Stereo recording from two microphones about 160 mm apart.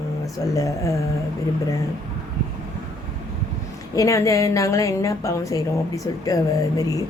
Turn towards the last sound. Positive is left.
turn(degrees=20)  # may be behind; listen again after turning